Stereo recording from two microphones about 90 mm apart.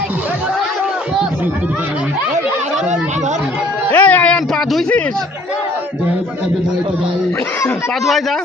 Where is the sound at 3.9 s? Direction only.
15° left (ahead or behind).